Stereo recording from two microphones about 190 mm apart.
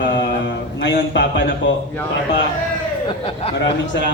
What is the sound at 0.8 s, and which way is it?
Speech, 75° left (ahead or behind).